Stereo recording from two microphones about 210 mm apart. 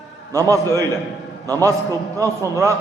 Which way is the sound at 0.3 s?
15° right (ahead or behind).